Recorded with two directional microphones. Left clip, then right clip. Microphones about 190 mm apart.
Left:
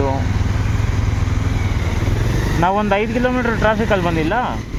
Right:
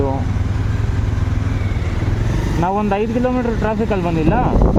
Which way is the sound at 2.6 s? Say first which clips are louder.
Left 2 dB; 10° right (ahead or behind).